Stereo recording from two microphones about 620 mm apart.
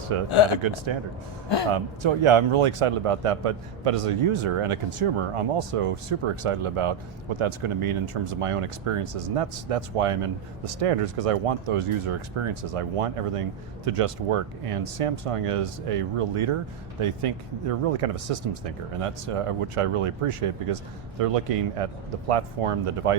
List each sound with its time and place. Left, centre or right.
0.1 s speech: right